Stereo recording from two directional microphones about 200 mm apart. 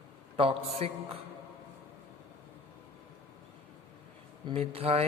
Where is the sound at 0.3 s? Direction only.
30° right (ahead or behind).